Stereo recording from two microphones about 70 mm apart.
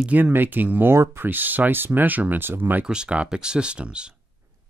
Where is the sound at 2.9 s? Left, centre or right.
Centre.